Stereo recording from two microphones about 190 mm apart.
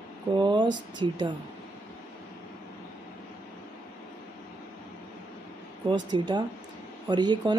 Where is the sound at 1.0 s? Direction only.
25° right (ahead or behind).